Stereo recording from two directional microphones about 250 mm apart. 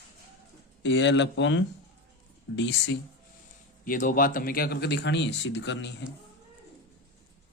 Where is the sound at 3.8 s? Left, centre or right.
Left.